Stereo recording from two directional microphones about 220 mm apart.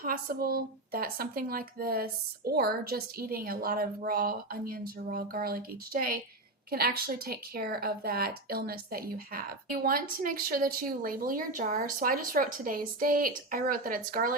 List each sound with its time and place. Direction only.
0.0 s a woman's voice: 40° right (ahead or behind)